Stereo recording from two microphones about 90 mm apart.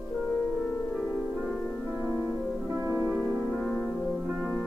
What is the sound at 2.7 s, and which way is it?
Music, 35° right (ahead or behind).